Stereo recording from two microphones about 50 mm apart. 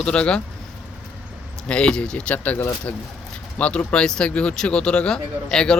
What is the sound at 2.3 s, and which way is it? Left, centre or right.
Speech, left.